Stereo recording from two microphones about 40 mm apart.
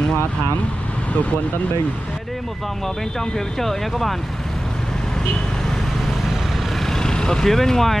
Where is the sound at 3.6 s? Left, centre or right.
Centre.